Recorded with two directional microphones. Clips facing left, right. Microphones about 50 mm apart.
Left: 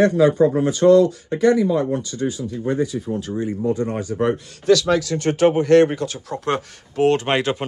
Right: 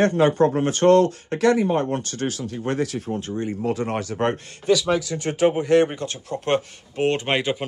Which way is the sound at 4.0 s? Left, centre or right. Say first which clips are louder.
Left 3 dB; right.